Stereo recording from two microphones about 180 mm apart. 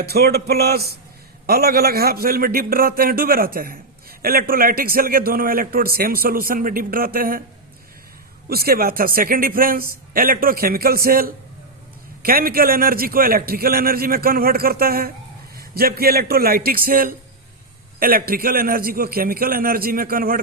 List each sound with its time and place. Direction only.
0.0 s a man's voice: 60° right (ahead or behind)
8.4 s a man's voice: 60° right (ahead or behind)